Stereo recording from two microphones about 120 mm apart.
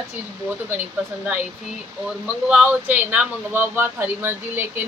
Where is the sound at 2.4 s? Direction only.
10° right (ahead or behind).